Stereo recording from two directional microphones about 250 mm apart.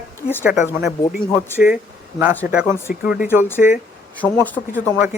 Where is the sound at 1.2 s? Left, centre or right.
Centre.